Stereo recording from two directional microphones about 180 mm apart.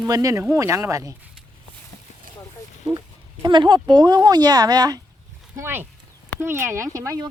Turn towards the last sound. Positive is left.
turn(degrees=-20)  # may be behind; listen again after turning